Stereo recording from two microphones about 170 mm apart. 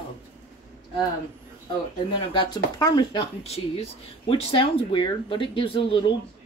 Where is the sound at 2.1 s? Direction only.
30° left (ahead or behind).